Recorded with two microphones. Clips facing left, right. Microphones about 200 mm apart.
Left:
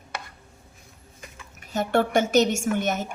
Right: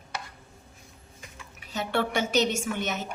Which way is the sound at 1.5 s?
50° left (ahead or behind).